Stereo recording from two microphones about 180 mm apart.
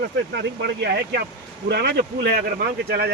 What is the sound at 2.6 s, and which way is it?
Speech, 60° right (ahead or behind).